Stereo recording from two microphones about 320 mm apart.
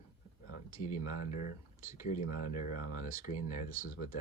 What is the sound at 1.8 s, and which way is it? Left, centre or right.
Speech, left.